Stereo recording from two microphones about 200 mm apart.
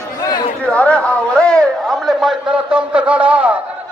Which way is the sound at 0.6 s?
5° left (ahead or behind).